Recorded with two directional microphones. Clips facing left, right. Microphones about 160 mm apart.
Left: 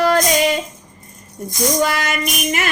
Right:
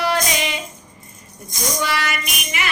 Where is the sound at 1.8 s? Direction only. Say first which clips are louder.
Left 2 dB; 45° left (ahead or behind).